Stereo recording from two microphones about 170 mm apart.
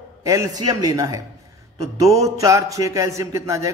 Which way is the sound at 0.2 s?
20° right (ahead or behind).